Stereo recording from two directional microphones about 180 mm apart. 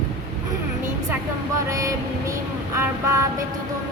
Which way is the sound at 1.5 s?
20° right (ahead or behind).